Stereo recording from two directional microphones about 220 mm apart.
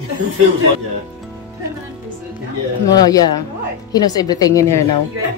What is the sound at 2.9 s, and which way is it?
A woman's voice, 15° left (ahead or behind).